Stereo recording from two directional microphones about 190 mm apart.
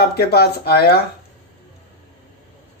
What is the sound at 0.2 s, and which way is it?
Speech, 60° left (ahead or behind).